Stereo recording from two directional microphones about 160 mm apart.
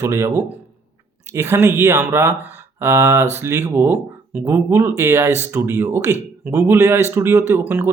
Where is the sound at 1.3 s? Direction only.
15° right (ahead or behind).